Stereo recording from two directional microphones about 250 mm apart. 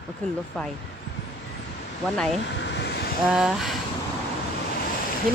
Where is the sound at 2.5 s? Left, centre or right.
Left.